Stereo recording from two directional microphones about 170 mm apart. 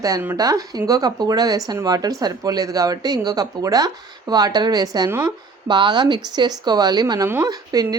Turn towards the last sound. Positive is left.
turn(degrees=-20)  # may be behind; listen again after turning